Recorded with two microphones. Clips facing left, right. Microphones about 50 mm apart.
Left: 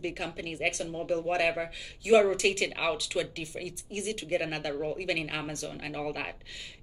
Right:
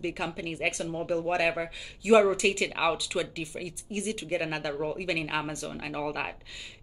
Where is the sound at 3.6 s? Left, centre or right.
Right.